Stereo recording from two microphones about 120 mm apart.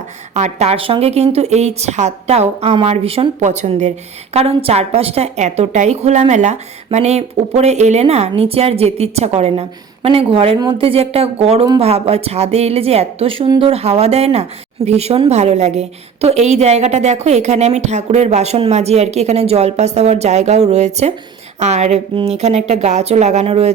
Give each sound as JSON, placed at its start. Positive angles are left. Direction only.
{"t": 0.3, "sound": "a woman's voice", "side_deg": -70}
{"t": 3.4, "sound": "a woman's voice", "side_deg": -75}
{"t": 4.4, "sound": "a woman's voice", "side_deg": -60}
{"t": 22.1, "sound": "a woman's voice", "side_deg": -55}